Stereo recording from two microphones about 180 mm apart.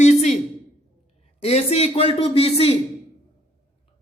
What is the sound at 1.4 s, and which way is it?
A man's voice, 35° left (ahead or behind).